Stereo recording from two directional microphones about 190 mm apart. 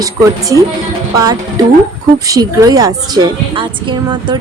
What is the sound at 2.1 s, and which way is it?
A woman's voice, 20° right (ahead or behind).